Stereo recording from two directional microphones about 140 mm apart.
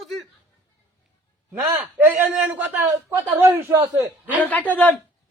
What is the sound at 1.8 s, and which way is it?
A man's voice, 15° right (ahead or behind).